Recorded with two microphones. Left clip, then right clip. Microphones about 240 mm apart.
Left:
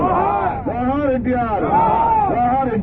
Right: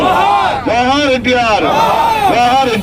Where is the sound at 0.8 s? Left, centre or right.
Centre.